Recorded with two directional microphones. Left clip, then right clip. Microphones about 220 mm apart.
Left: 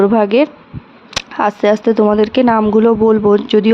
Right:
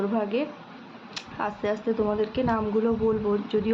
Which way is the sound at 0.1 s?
50° left (ahead or behind).